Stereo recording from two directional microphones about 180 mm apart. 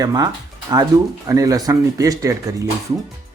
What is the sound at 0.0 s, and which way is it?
Speech, 20° right (ahead or behind).